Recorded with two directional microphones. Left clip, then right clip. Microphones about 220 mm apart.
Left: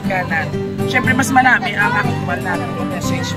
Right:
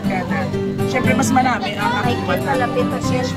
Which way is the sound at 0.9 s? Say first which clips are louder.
Left 3 dB; 5° left (ahead or behind).